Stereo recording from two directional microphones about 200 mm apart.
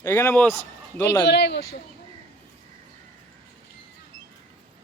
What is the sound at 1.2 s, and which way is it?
Speech, 60° left (ahead or behind).